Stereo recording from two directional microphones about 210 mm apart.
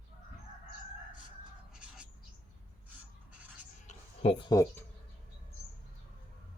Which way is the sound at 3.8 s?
30° left (ahead or behind).